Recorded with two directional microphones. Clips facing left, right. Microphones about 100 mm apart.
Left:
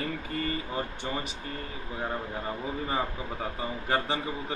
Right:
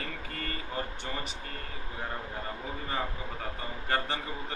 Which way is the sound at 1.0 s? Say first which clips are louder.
Left 4 dB; 15° left (ahead or behind).